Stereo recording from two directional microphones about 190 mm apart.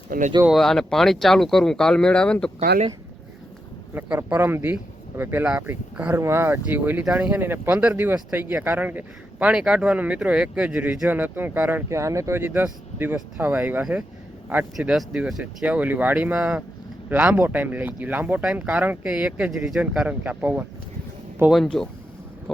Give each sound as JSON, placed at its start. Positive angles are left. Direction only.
{"t": 0.1, "sound": "speech", "side_deg": -40}
{"t": 0.4, "sound": "speech", "side_deg": 0}
{"t": 3.9, "sound": "speech", "side_deg": -10}